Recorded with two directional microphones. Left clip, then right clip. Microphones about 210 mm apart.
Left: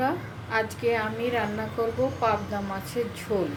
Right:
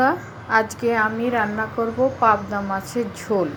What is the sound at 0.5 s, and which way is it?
A woman's voice, 20° right (ahead or behind).